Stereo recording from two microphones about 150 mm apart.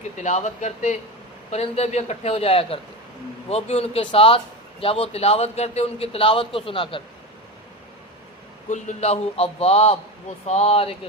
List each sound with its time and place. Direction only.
0.2 s a man's voice: 50° left (ahead or behind)
8.7 s a man's voice: 50° left (ahead or behind)